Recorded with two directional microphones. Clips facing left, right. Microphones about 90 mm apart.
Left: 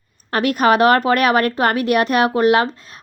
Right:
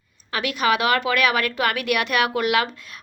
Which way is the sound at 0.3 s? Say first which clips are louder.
Left 6 dB; 45° left (ahead or behind).